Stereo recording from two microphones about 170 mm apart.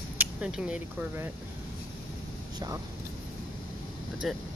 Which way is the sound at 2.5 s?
20° right (ahead or behind).